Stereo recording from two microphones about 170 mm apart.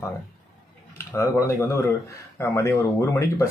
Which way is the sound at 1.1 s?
15° left (ahead or behind).